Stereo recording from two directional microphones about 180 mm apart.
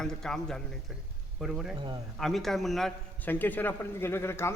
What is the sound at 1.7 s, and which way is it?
Speech, 25° right (ahead or behind).